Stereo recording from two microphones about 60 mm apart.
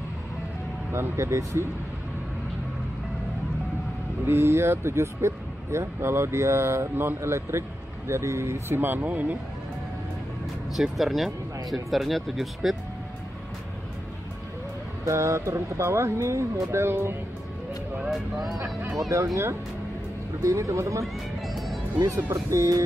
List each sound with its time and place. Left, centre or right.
0.9 s speech: right
4.3 s speech: right
9.0 s speech: right
10.7 s speech: centre
15.0 s speech: right
18.1 s speech: centre
18.6 s speech: right
19.0 s speech: right
20.4 s speech: right
22.0 s speech: right